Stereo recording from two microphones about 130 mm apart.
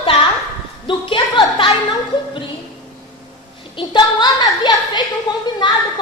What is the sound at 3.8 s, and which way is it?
A woman's voice, 35° left (ahead or behind).